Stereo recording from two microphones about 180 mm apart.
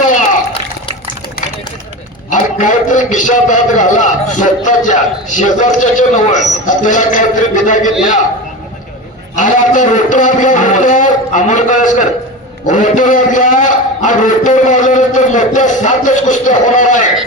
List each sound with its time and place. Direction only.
2.3 s a man's voice: 45° left (ahead or behind)
9.3 s a man's voice: 45° left (ahead or behind)